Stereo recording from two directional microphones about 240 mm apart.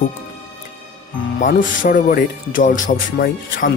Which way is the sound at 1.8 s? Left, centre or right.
Left.